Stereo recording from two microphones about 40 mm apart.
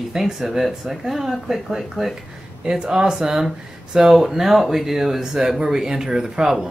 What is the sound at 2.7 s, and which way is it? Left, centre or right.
Speech, right.